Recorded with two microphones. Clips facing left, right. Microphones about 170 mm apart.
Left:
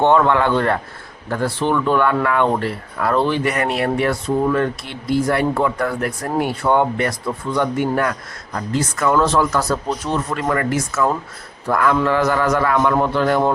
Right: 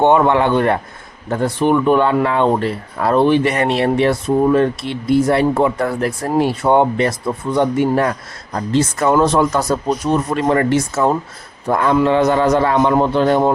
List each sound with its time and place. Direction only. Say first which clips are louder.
0.0 s speech: right 2 dB; 20° right (ahead or behind)